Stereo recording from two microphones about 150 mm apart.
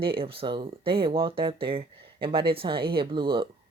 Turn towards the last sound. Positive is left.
turn(degrees=-30)  # may be behind; listen again after turning